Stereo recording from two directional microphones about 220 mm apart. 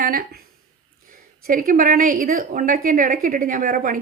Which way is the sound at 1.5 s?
40° right (ahead or behind).